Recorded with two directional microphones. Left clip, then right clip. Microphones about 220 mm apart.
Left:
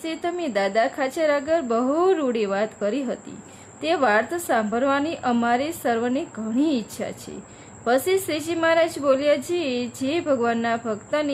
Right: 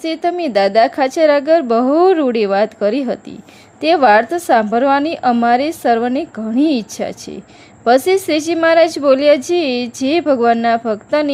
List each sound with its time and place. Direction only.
0.0 s a woman's voice: 25° right (ahead or behind)